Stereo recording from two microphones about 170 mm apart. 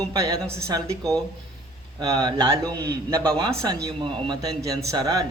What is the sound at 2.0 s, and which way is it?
A man's voice, 25° right (ahead or behind).